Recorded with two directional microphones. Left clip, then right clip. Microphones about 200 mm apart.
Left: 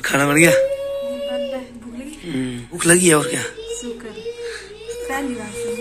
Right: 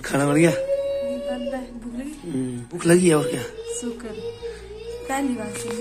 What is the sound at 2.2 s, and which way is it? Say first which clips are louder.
Speech: left 5 dB; 5° right (ahead or behind).